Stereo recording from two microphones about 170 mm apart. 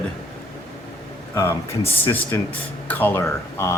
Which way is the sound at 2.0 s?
15° left (ahead or behind).